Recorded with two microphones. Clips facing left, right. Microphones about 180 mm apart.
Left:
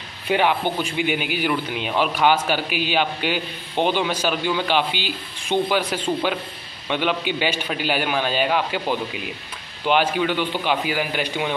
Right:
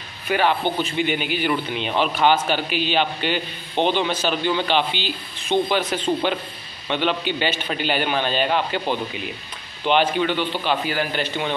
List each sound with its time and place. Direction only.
0.3 s a man's voice: 15° left (ahead or behind)